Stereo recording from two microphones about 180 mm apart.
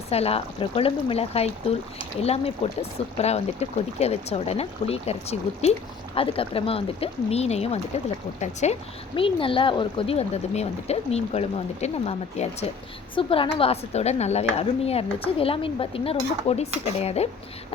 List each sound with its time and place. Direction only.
0.1 s speech: 35° left (ahead or behind)